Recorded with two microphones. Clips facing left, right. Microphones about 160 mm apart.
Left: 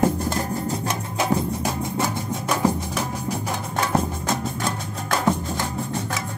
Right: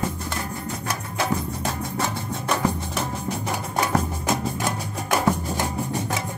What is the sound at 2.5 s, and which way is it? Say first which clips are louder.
Music: left 2 dB; centre (ahead or behind).